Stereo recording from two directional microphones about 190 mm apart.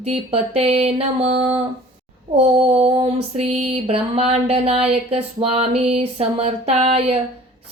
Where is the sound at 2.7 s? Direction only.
30° right (ahead or behind).